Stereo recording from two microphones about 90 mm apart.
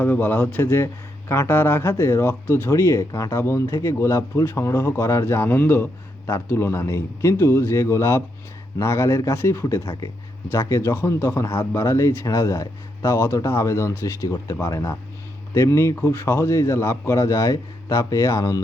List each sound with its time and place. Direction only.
0.0 s a man's voice: 20° left (ahead or behind); by 18.6 s 35° left (ahead or behind)